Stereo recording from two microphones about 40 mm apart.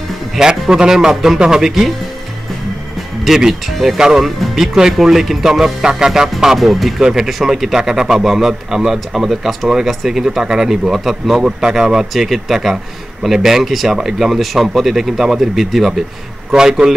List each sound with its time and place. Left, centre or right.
0.4 s speech: centre
3.3 s speech: centre
7.0 s speech: centre
11.4 s speech: centre